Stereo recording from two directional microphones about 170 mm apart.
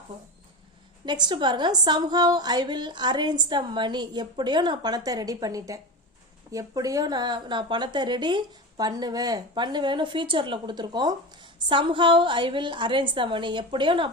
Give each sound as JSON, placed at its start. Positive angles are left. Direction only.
{"t": 1.0, "sound": "a woman's voice", "side_deg": -25}